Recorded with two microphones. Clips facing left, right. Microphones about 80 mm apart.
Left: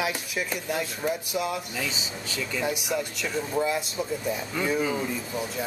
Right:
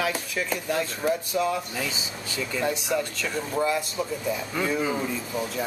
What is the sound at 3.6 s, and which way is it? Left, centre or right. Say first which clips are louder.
Speech: right 2 dB; centre.